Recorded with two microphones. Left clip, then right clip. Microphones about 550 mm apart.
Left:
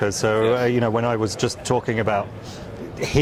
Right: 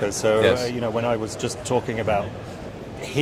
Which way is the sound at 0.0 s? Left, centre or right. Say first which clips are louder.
Right 1 dB; left.